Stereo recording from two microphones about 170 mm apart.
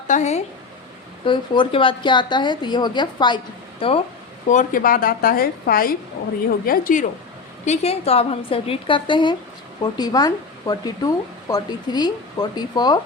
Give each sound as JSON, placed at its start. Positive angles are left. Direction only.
{"t": 0.1, "sound": "speech", "side_deg": 40}
{"t": 1.2, "sound": "speech", "side_deg": 30}
{"t": 4.4, "sound": "a woman's voice", "side_deg": 50}
{"t": 7.6, "sound": "a woman's voice", "side_deg": 40}